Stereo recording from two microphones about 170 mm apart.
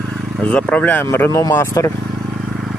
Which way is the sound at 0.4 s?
5° left (ahead or behind).